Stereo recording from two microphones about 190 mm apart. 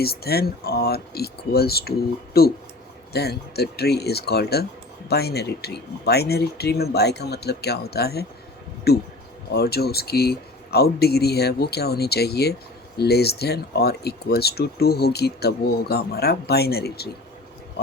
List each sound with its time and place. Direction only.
0.0 s speech: 55° left (ahead or behind)